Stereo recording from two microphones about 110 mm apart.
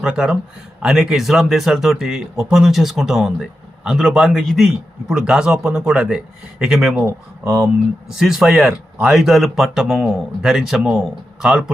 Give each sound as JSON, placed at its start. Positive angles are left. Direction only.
{"t": 0.0, "sound": "speech", "side_deg": -10}
{"t": 7.0, "sound": "speech", "side_deg": -25}
{"t": 8.2, "sound": "speech", "side_deg": -5}